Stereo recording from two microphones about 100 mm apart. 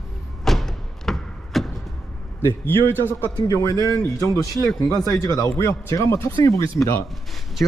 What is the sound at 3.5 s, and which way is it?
Speech, 35° left (ahead or behind).